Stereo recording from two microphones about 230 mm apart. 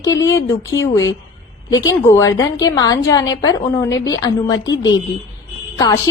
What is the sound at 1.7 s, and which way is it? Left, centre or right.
A woman's voice, centre.